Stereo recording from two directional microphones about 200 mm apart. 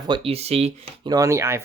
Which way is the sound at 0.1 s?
30° right (ahead or behind).